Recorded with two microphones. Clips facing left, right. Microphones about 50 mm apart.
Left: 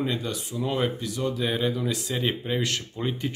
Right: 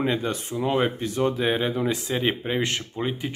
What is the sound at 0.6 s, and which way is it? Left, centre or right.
Speech, right.